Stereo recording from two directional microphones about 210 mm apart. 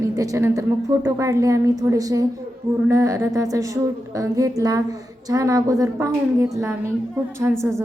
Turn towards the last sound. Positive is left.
turn(degrees=-10)  # may be behind; listen again after turning